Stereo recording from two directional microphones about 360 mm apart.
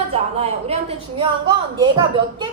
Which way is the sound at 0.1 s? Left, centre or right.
Centre.